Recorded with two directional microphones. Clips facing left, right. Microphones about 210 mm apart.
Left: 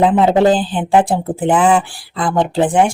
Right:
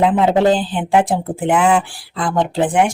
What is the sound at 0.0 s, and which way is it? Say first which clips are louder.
Speech: left 2 dB; 35° left (ahead or behind).